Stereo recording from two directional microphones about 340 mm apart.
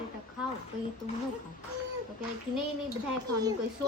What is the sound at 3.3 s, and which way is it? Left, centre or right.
Speech, centre.